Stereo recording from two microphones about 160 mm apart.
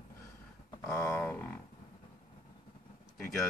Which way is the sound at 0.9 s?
15° left (ahead or behind).